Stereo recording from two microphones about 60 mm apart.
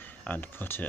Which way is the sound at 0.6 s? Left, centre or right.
Left.